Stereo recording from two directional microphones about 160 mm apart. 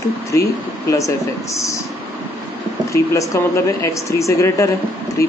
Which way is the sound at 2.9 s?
20° left (ahead or behind).